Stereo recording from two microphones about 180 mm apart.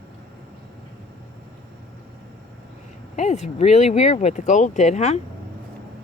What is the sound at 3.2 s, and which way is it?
Speech, 40° left (ahead or behind).